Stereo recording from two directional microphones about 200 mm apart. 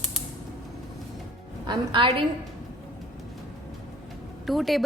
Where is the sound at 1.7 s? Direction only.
25° right (ahead or behind).